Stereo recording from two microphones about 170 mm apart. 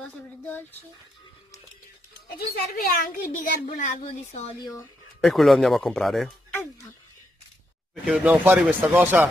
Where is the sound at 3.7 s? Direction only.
45° left (ahead or behind).